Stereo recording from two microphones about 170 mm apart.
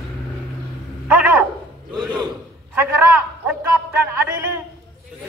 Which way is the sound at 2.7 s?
15° right (ahead or behind).